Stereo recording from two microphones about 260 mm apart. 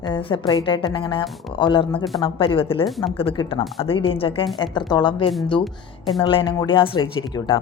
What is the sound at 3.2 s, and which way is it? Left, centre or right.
Speech, left.